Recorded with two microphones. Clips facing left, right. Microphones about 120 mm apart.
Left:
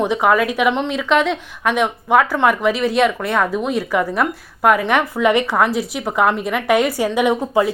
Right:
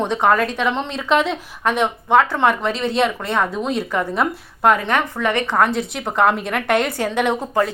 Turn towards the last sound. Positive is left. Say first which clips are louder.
# left 3 dB
turn(degrees=10)  # may be behind; listen again after turning